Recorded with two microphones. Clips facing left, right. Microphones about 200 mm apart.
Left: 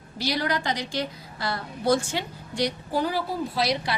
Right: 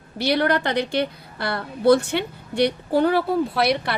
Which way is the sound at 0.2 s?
60° right (ahead or behind).